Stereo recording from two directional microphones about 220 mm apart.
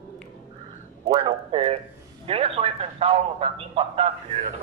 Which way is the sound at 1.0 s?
20° right (ahead or behind).